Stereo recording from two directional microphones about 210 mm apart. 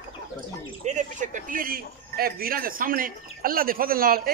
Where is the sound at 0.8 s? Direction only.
35° right (ahead or behind).